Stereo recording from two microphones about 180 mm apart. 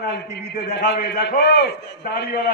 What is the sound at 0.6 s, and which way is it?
A man's voice, 65° left (ahead or behind).